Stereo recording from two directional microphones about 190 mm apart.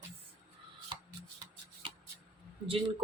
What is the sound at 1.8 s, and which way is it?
Shuffling cards, 30° right (ahead or behind).